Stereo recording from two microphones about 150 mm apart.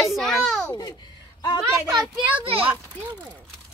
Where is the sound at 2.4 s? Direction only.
40° right (ahead or behind).